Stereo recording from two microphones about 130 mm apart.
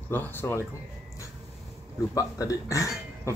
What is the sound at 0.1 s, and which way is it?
Speech, 15° left (ahead or behind).